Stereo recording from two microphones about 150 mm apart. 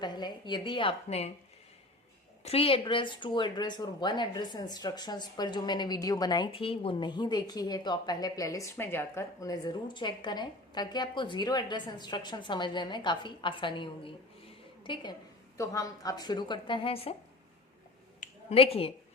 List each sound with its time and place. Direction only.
0.0 s a woman's voice: 30° left (ahead or behind)
2.4 s speech: 40° left (ahead or behind)
15.5 s speech: 20° left (ahead or behind); by 17.2 s 40° left (ahead or behind)
18.5 s speech: 40° left (ahead or behind)